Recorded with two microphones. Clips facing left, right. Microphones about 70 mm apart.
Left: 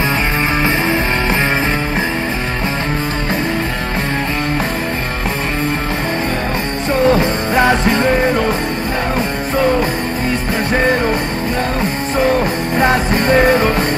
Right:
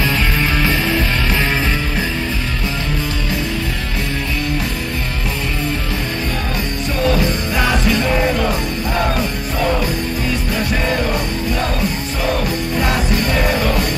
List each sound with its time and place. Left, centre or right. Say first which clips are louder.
0.6 s music: left 3 dB; left
7.0 s music: left 4 dB; left
12.7 s music: left 6 dB; left